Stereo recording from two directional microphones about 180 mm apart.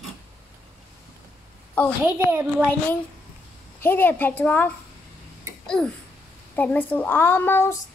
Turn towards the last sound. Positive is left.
turn(degrees=15)  # may be behind; listen again after turning